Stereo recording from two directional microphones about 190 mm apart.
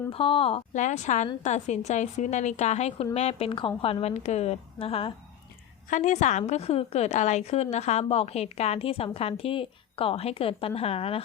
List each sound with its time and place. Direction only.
0.1 s a woman's voice: 30° left (ahead or behind)